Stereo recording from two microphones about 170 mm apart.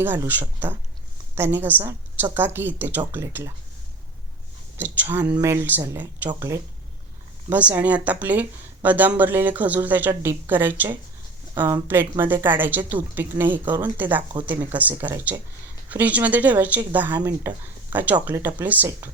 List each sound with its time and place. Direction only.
0.0 s speech: 10° right (ahead or behind)
4.8 s speech: 10° right (ahead or behind)
17.2 s speech: 20° right (ahead or behind)
17.9 s speech: 10° right (ahead or behind)